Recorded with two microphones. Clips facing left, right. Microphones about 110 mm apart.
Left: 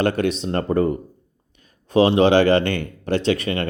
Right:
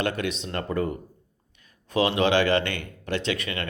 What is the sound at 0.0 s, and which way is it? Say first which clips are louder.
Speech: left 7 dB; 40° left (ahead or behind).